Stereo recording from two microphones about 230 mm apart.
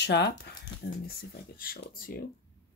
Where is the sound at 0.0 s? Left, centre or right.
Left.